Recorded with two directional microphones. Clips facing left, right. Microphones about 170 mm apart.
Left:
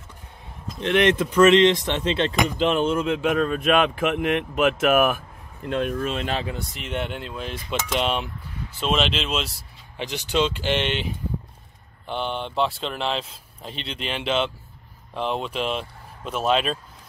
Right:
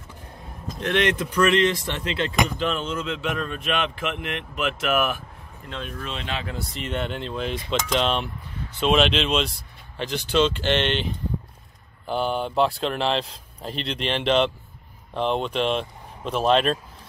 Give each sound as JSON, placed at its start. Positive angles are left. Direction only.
{"t": 0.7, "sound": "speech", "side_deg": 20}
{"t": 2.8, "sound": "speech", "side_deg": 55}
{"t": 6.7, "sound": "speech", "side_deg": 5}
{"t": 12.1, "sound": "speech", "side_deg": -5}